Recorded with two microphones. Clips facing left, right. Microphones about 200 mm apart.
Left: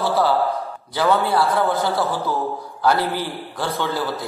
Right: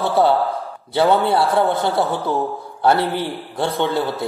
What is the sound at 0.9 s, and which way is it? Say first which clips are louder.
A man's voice: right 3 dB; 25° right (ahead or behind).